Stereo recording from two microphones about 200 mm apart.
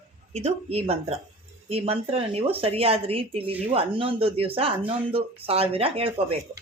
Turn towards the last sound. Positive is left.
turn(degrees=-30)  # may be behind; listen again after turning